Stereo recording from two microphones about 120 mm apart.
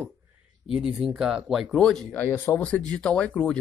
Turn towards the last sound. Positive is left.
turn(degrees=5)  # may be behind; listen again after turning